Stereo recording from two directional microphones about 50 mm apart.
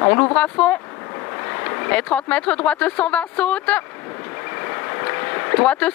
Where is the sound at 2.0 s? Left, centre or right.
Left.